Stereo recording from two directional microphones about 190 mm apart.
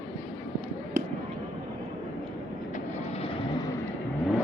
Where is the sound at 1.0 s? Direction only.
45° right (ahead or behind).